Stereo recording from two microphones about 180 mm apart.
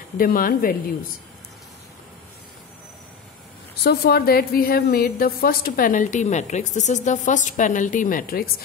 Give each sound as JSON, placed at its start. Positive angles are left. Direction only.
{"t": 0.2, "sound": "a woman's voice", "side_deg": 50}
{"t": 3.8, "sound": "a woman's voice", "side_deg": 60}